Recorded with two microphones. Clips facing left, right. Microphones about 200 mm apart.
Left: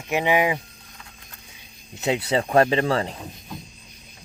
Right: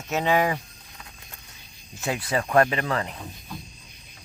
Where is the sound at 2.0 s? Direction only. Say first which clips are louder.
Left 4 dB; 25° left (ahead or behind).